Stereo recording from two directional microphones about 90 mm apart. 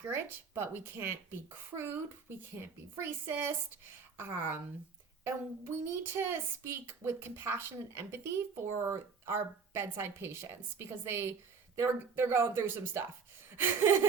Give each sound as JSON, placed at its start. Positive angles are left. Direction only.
{"t": 0.1, "sound": "speech", "side_deg": -25}